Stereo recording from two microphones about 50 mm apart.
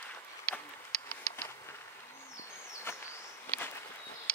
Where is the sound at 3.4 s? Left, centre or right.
Left.